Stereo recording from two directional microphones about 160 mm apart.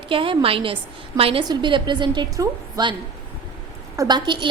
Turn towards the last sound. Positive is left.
turn(degrees=-30)  # may be behind; listen again after turning